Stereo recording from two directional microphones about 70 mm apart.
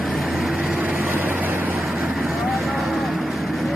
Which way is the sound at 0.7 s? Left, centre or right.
Right.